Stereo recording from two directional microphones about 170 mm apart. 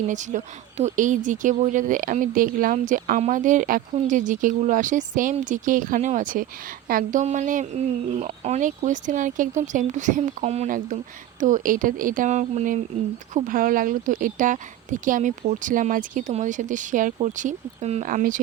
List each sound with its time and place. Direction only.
0.1 s speech: 45° right (ahead or behind)